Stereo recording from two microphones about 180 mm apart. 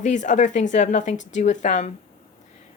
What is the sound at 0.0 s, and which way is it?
A woman's voice, 40° left (ahead or behind).